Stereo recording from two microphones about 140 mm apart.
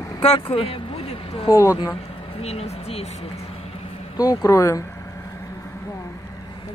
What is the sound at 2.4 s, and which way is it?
Speech, 45° left (ahead or behind).